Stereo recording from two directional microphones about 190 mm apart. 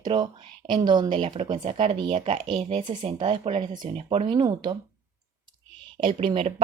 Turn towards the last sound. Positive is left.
turn(degrees=-30)  # may be behind; listen again after turning